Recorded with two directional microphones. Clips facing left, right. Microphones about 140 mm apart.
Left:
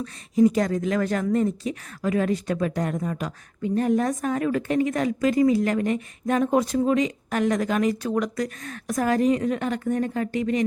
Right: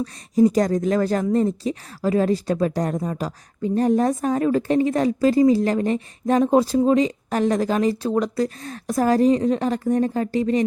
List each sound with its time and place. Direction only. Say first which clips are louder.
0.0 s speech: right 2 dB; 35° right (ahead or behind)